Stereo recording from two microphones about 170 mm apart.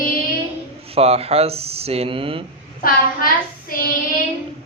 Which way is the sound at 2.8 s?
60° left (ahead or behind).